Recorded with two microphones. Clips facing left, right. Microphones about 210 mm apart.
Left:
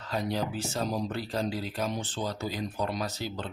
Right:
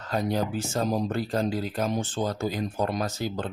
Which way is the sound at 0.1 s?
50° right (ahead or behind).